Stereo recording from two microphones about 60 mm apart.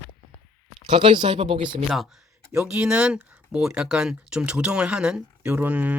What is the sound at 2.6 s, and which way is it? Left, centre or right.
Speech, centre.